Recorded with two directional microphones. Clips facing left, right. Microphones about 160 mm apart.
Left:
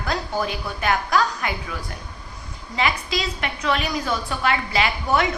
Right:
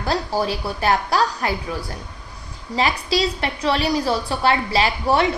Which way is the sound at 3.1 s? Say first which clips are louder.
Right 5 dB; 35° right (ahead or behind).